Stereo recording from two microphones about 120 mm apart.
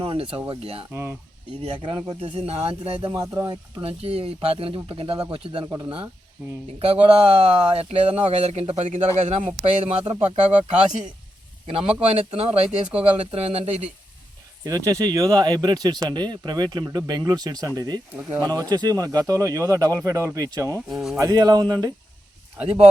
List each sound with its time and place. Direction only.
0.0 s speech: 50° right (ahead or behind)
1.8 s speech: 45° right (ahead or behind)
3.3 s speech: 35° right (ahead or behind)
6.7 s speech: 50° right (ahead or behind); by 10.8 s 70° right (ahead or behind)
11.6 s speech: 50° right (ahead or behind)
14.6 s speech: 30° right (ahead or behind)
18.2 s speech: 20° right (ahead or behind)
18.4 s speech: 30° right (ahead or behind)
20.9 s speech: 5° right (ahead or behind)
21.2 s speech: 30° right (ahead or behind)